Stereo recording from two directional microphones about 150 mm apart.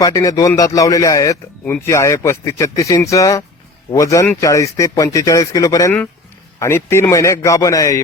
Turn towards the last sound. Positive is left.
turn(degrees=25)  # may be behind; listen again after turning